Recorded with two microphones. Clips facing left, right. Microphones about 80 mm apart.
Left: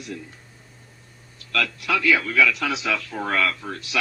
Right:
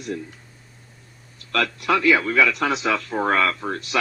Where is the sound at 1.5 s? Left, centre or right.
Right.